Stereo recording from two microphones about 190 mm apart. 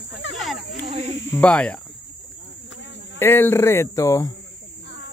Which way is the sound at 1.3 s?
5° left (ahead or behind).